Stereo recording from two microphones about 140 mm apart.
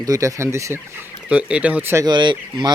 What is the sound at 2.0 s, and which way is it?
Speech, 35° right (ahead or behind).